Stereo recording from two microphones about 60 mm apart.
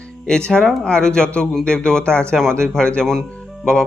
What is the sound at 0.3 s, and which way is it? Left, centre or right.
Speech, centre.